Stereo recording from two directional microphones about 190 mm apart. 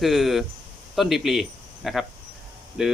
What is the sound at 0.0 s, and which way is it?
Speech, centre (ahead or behind).